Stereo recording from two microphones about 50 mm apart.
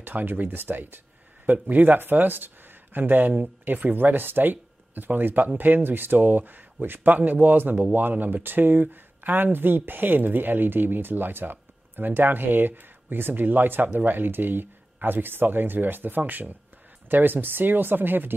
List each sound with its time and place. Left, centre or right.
0.0 s speech: right